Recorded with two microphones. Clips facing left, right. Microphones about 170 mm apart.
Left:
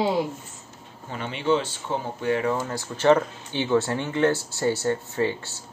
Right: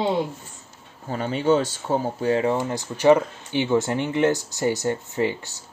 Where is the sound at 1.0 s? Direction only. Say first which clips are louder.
Right 4 dB; 40° right (ahead or behind).